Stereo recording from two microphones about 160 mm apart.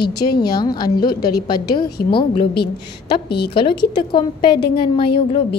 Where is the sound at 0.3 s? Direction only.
75° left (ahead or behind).